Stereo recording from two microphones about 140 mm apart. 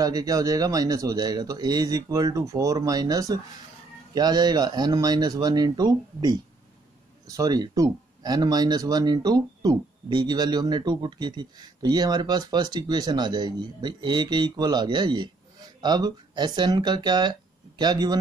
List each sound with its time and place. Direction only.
0.0 s speech: 25° right (ahead or behind)